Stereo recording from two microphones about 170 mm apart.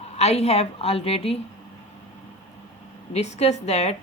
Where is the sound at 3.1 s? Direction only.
40° left (ahead or behind).